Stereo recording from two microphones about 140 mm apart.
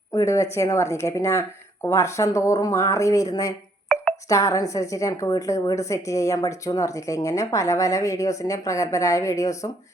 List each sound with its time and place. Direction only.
0.1 s a woman's voice: 25° left (ahead or behind)